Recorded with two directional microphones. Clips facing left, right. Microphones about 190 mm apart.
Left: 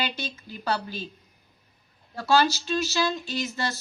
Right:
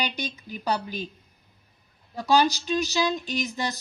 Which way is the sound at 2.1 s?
15° right (ahead or behind).